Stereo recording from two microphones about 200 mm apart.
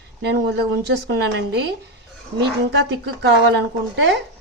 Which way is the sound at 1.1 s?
55° right (ahead or behind).